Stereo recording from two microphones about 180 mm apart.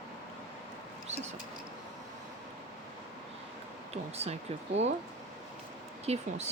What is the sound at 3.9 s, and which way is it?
Speech, 35° right (ahead or behind).